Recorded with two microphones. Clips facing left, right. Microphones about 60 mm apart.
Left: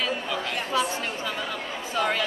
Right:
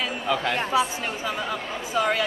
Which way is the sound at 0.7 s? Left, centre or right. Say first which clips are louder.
Right 2 dB; centre.